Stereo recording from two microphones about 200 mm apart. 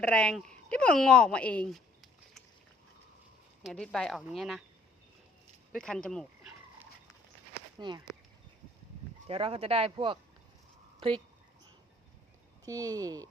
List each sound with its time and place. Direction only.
0.0 s speech: 5° left (ahead or behind)
3.6 s speech: 5° left (ahead or behind)
5.7 s speech: 5° left (ahead or behind)
7.8 s speech: 20° right (ahead or behind)
9.2 s speech: 30° right (ahead or behind)
12.6 s speech: 15° right (ahead or behind)